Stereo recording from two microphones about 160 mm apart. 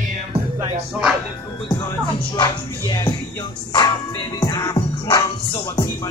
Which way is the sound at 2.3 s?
30° left (ahead or behind).